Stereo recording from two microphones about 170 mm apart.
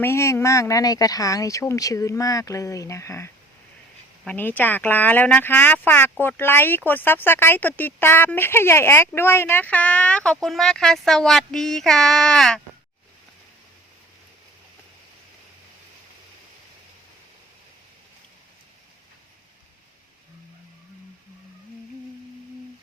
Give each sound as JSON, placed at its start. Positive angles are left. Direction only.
{"t": 0.0, "sound": "speech", "side_deg": 15}